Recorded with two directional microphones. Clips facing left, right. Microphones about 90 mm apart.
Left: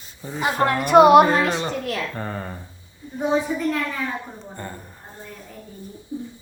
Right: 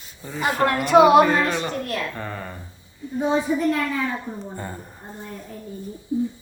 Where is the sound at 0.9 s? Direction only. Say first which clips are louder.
Left 2 dB; 50° left (ahead or behind).